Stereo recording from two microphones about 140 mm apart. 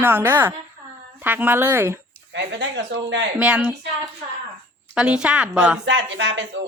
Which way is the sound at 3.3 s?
10° right (ahead or behind).